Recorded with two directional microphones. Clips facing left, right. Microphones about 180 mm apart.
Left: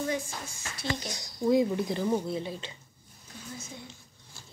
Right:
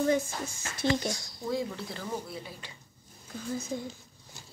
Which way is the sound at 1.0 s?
20° left (ahead or behind).